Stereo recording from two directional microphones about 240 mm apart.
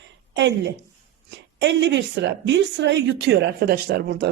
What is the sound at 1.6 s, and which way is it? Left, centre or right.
A woman's voice, right.